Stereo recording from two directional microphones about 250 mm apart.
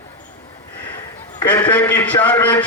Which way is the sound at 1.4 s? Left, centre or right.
Centre.